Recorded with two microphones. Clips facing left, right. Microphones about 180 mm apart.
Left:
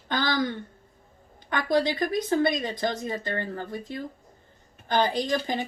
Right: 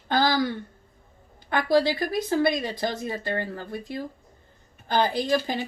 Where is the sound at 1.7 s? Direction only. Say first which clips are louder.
Right 2 dB; 20° left (ahead or behind).